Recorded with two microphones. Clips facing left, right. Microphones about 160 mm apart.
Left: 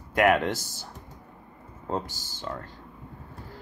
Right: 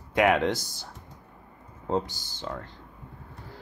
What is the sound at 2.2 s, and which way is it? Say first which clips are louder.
Speech: left 1 dB; 55° right (ahead or behind).